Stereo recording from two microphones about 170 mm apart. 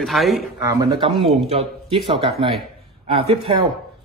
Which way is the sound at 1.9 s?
30° right (ahead or behind).